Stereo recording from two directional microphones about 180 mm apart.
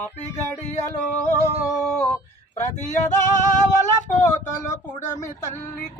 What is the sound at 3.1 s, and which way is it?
Female singing, 45° left (ahead or behind).